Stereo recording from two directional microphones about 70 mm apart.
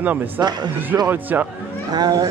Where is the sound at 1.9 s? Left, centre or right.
Right.